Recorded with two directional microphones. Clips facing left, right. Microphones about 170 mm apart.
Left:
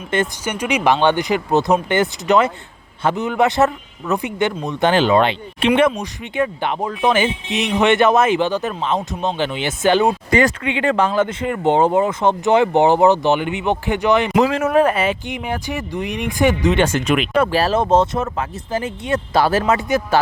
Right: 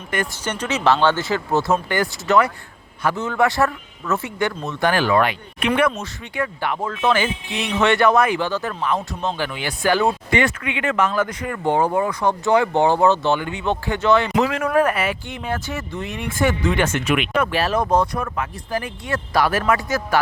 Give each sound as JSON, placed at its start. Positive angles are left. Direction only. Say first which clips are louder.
{"t": 0.1, "sound": "speech", "louder": "left 5 dB", "side_deg": 25}
{"t": 0.4, "sound": "speech", "louder": "right 1 dB", "side_deg": 10}
{"t": 10.2, "sound": "speech", "louder": "left 4 dB", "side_deg": 40}
{"t": 14.3, "sound": "speech", "louder": "left 4 dB", "side_deg": 35}
{"t": 14.6, "sound": "speech", "louder": "left 3 dB", "side_deg": 25}
{"t": 17.2, "sound": "speech", "louder": "left 4 dB", "side_deg": 35}